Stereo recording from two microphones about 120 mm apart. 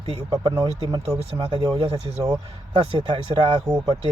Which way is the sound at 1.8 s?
60° right (ahead or behind).